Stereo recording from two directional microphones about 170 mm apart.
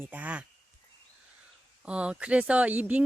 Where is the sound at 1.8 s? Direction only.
5° right (ahead or behind).